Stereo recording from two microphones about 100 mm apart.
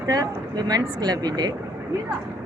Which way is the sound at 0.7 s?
40° right (ahead or behind).